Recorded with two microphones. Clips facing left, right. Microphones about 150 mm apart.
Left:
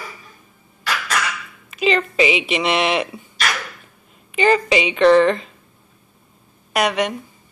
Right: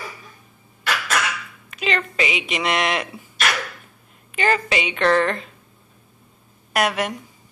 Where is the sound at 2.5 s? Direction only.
Centre (ahead or behind).